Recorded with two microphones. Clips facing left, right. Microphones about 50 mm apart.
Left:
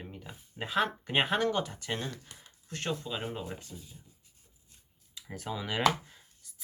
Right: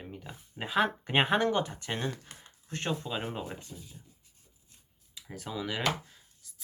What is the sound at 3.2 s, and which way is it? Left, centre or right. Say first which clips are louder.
Speech: right 1 dB; centre.